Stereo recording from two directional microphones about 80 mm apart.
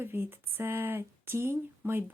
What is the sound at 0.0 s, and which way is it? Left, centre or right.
Speech, right.